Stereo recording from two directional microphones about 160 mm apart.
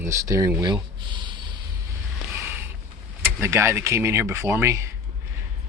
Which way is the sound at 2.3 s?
15° right (ahead or behind).